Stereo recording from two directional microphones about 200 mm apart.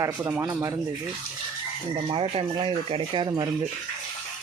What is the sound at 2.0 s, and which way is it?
Speech, 25° right (ahead or behind).